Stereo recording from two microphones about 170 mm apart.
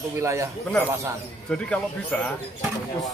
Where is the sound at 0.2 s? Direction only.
15° right (ahead or behind).